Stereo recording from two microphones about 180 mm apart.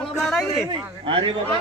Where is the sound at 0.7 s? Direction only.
30° right (ahead or behind).